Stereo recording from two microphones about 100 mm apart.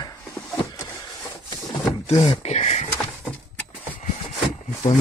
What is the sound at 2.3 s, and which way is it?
Speech, 90° left.